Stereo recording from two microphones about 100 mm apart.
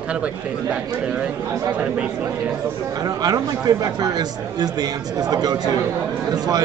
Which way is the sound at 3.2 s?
35° right (ahead or behind).